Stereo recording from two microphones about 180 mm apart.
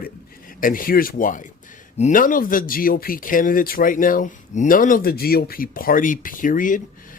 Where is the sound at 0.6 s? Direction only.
50° left (ahead or behind).